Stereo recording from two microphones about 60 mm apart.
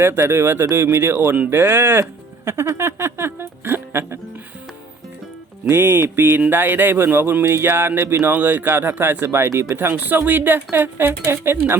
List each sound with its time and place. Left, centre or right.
0.0 s speech: right
5.6 s speech: right
9.5 s speech: right
9.7 s speech: right